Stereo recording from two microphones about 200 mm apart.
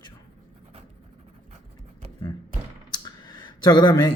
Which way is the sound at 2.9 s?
20° left (ahead or behind).